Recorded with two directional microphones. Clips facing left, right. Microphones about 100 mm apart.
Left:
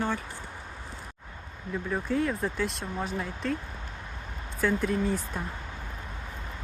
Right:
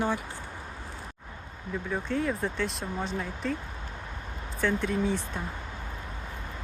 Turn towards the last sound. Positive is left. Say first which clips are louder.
# even
turn(degrees=0)  # may be behind; listen again after turning